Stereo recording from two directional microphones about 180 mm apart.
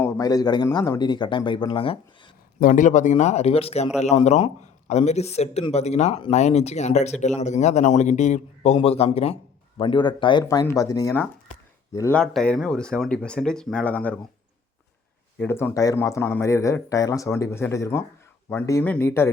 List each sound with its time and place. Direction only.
0.2 s speech: 20° left (ahead or behind)
2.6 s speech: 45° left (ahead or behind); by 12.2 s 15° left (ahead or behind)
12.2 s speech: 5° left (ahead or behind)
15.4 s speech: 10° left (ahead or behind)